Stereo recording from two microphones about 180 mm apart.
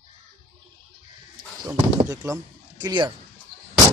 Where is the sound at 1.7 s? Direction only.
15° right (ahead or behind).